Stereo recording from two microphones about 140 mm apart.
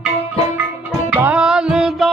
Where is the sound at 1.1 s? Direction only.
15° right (ahead or behind).